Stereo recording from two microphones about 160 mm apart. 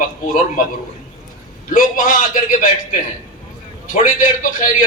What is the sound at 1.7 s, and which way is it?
A man's voice, 60° left (ahead or behind).